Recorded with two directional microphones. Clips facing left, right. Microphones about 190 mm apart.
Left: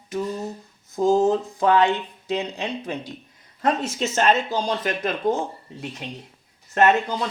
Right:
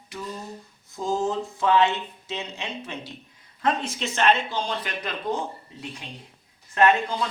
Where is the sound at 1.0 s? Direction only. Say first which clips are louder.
Left 7 dB; 40° left (ahead or behind).